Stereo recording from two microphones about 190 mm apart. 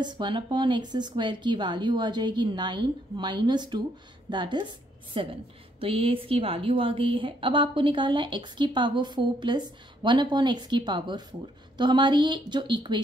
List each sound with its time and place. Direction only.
0.0 s a woman's voice: 25° right (ahead or behind)